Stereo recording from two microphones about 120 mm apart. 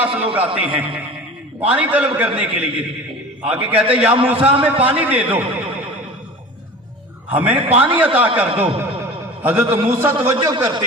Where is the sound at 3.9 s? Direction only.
10° right (ahead or behind).